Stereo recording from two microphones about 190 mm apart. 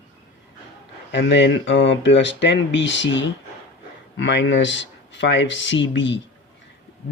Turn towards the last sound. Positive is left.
turn(degrees=75)  # may be behind; listen again after turning